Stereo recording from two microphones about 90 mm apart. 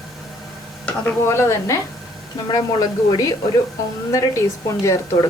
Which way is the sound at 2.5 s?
50° left (ahead or behind).